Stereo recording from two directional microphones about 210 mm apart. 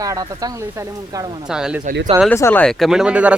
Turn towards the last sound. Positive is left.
turn(degrees=-5)  # may be behind; listen again after turning